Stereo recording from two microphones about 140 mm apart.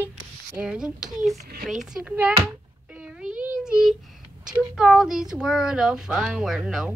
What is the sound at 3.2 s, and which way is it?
Child singing, 10° right (ahead or behind).